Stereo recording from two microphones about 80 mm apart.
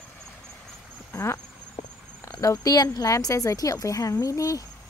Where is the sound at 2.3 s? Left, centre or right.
Left.